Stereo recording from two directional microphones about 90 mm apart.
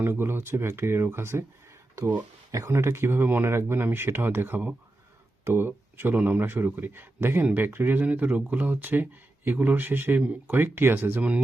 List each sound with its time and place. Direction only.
0.0 s speech: 25° right (ahead or behind)
2.5 s speech: 35° right (ahead or behind)